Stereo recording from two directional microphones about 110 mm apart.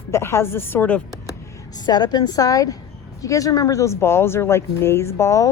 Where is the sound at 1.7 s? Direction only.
40° left (ahead or behind).